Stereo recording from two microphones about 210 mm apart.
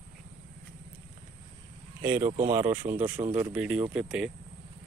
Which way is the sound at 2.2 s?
35° right (ahead or behind).